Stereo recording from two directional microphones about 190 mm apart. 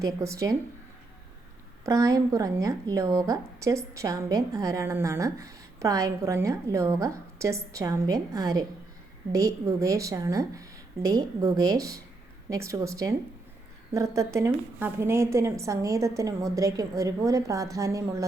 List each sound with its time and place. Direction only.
0.0 s a woman's voice: 15° right (ahead or behind)
1.8 s a woman's voice: 15° right (ahead or behind)